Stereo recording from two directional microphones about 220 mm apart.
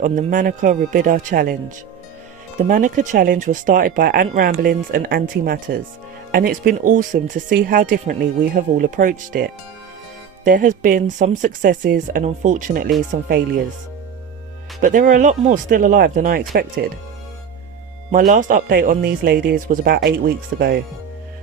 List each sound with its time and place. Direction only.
0.0 s speech: 35° right (ahead or behind)
2.6 s speech: 35° right (ahead or behind)
14.8 s speech: 35° right (ahead or behind)
18.1 s speech: 35° right (ahead or behind)